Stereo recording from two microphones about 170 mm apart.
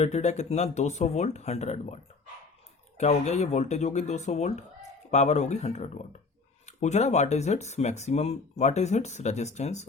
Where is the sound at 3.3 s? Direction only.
40° left (ahead or behind).